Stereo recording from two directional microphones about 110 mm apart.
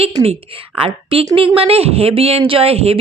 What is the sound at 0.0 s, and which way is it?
Speech, 60° right (ahead or behind).